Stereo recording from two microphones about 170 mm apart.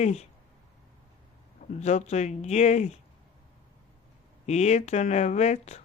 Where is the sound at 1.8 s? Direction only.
40° left (ahead or behind).